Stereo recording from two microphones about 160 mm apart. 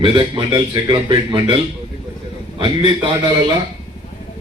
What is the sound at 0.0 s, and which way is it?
A man's voice, 35° right (ahead or behind).